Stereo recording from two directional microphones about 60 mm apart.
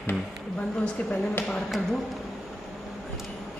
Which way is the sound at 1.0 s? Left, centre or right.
Left.